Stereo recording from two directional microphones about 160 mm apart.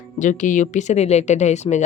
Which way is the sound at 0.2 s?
50° left (ahead or behind).